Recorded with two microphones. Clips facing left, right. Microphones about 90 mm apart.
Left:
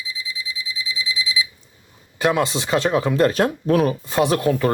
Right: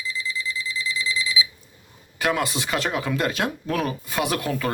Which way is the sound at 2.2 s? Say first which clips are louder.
Left 4 dB; 25° left (ahead or behind).